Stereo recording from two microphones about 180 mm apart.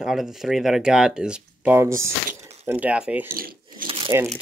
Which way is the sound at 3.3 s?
55° right (ahead or behind).